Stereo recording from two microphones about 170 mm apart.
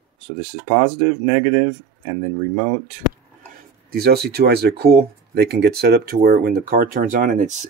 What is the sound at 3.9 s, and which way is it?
Speech, 70° right (ahead or behind).